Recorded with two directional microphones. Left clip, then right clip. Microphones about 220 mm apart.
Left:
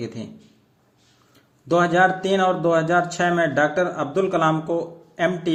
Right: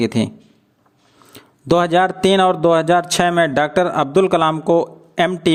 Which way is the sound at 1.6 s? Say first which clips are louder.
Right 3 dB; 50° right (ahead or behind).